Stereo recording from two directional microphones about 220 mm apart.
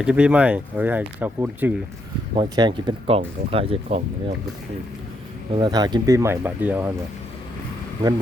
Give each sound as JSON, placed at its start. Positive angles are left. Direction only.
{"t": 0.0, "sound": "speech", "side_deg": -5}
{"t": 2.3, "sound": "speech", "side_deg": -20}
{"t": 5.5, "sound": "speech", "side_deg": -20}